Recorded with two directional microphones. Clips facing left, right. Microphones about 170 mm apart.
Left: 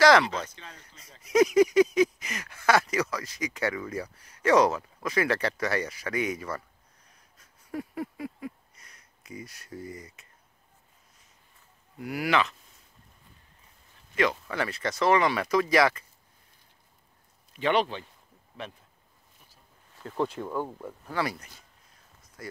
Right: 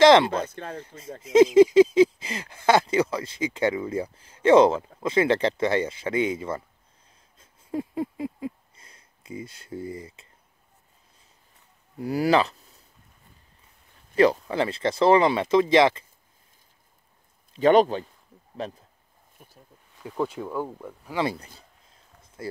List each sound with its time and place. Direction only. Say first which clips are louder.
0.0 s a sound: right 5 dB; 25° right (ahead or behind)
0.3 s speech: right 7 dB; 55° right (ahead or behind)
0.7 s speech: right 16 dB; 25° right (ahead or behind)
7.3 s a sound: right 5 dB; 25° right (ahead or behind)
12.0 s speech: right 6 dB; 35° right (ahead or behind)
14.1 s speech: right 7 dB; 35° right (ahead or behind)
17.6 s speech: right 8 dB; 40° right (ahead or behind)
20.0 s speech: right 1 dB; 5° right (ahead or behind)
21.1 s speech: right 4 dB; 25° right (ahead or behind)
21.9 s a sound: right 6 dB; 25° right (ahead or behind)